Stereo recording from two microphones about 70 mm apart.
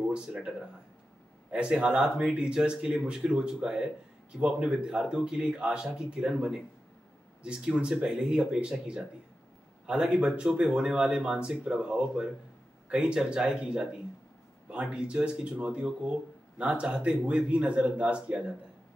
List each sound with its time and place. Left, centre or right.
0.0 s speech: centre
1.5 s speech: centre